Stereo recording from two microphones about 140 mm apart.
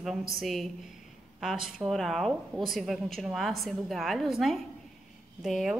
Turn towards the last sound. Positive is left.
turn(degrees=0)  # may be behind; listen again after turning